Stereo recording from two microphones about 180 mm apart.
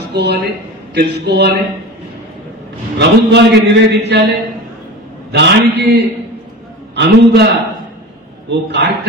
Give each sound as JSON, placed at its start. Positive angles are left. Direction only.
{"t": 0.0, "sound": "a man's voice", "side_deg": -60}
{"t": 3.0, "sound": "a man's voice", "side_deg": -70}